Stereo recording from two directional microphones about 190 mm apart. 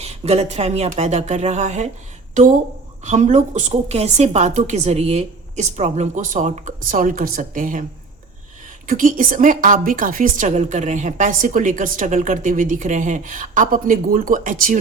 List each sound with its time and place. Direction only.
0.0 s a woman's voice: 35° right (ahead or behind)
3.0 s a woman's voice: 40° right (ahead or behind)
8.9 s a woman's voice: 45° right (ahead or behind)